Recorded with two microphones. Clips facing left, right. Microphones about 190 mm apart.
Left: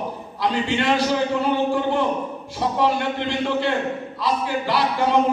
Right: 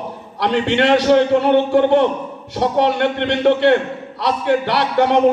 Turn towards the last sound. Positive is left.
turn(degrees=-70)  # may be behind; listen again after turning